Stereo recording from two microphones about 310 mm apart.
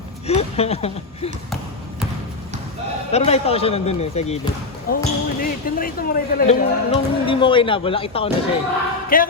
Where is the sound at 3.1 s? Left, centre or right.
Centre.